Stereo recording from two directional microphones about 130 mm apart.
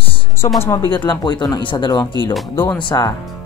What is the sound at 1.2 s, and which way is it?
Speech, 35° left (ahead or behind).